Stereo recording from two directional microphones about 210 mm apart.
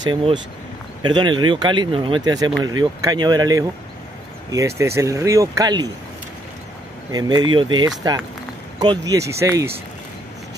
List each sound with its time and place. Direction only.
0.0 s speech: 20° right (ahead or behind)
7.1 s speech: 20° right (ahead or behind)